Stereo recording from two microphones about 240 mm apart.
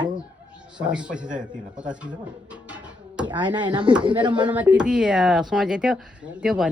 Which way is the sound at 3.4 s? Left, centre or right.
Centre.